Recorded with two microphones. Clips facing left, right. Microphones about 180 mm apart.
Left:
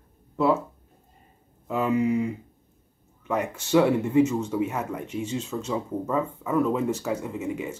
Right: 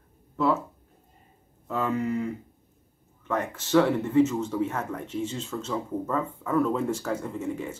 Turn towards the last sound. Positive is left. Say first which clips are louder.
# left 1 dB
turn(degrees=10)  # may be behind; listen again after turning